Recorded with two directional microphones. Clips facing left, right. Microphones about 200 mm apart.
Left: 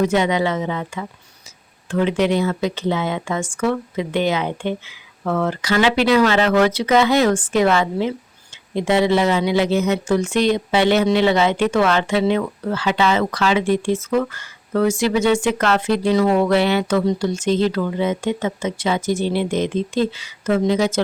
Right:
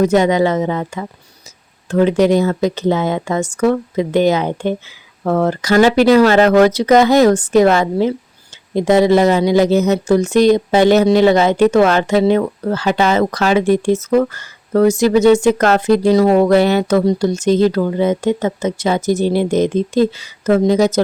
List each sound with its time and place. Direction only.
0.0 s speech: 40° right (ahead or behind)